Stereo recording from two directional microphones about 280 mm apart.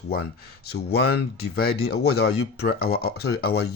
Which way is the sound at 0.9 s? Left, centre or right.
Left.